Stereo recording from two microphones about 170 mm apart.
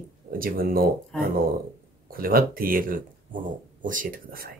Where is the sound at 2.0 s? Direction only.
60° right (ahead or behind).